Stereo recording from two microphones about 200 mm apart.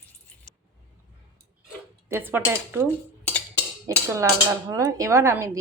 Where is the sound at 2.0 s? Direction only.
10° right (ahead or behind).